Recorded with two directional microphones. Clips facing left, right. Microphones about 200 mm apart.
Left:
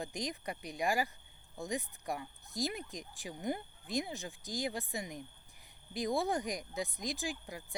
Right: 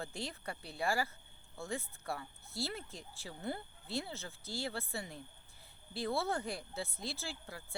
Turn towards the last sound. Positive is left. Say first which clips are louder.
# left 5 dB
turn(degrees=15)  # may be behind; listen again after turning